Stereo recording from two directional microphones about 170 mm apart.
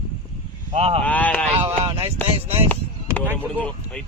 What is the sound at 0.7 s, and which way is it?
Speech, 35° right (ahead or behind).